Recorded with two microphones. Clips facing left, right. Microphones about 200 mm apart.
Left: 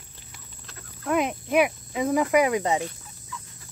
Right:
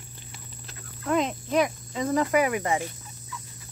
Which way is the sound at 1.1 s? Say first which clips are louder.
Left 1 dB; 10° left (ahead or behind).